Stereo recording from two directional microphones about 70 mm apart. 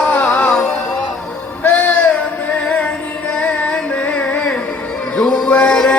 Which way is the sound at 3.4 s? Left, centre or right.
Centre.